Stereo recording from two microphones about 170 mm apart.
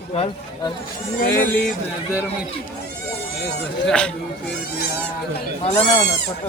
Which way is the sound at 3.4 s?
70° left (ahead or behind).